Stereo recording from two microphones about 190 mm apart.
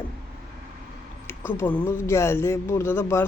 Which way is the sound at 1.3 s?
15° left (ahead or behind).